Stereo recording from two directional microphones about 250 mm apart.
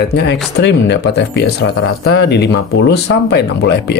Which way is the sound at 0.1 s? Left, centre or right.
Left.